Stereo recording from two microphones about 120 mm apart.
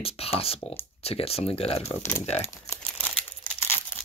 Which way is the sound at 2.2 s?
60° left (ahead or behind).